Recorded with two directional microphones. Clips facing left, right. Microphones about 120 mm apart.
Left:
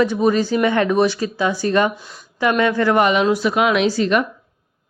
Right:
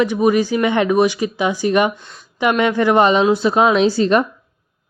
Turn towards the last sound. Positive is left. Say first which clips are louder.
# right 3 dB
turn(degrees=-30)  # may be behind; listen again after turning